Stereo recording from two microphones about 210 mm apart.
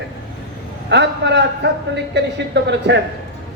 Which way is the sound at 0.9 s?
55° right (ahead or behind).